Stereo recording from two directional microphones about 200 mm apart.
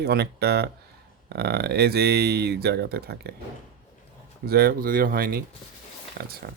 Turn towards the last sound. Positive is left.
turn(degrees=-50)  # may be behind; listen again after turning